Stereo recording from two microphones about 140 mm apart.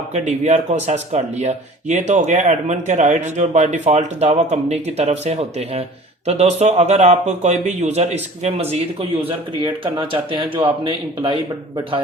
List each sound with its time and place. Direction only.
0.1 s speech: 50° right (ahead or behind); by 11.3 s 35° right (ahead or behind)